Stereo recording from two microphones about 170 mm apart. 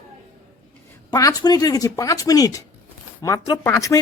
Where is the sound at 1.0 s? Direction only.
20° left (ahead or behind).